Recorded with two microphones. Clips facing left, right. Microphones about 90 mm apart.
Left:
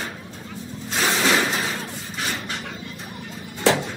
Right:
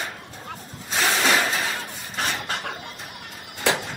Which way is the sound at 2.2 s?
45° right (ahead or behind).